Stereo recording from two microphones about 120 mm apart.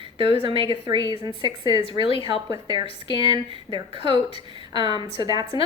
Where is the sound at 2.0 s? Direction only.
50° left (ahead or behind).